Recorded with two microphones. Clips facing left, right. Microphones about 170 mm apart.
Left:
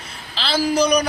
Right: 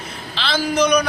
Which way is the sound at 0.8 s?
10° left (ahead or behind).